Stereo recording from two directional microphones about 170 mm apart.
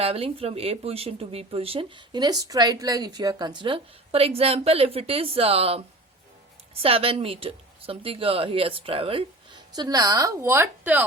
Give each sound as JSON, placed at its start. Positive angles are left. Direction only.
{"t": 0.0, "sound": "speech", "side_deg": -35}
{"t": 6.8, "sound": "speech", "side_deg": -35}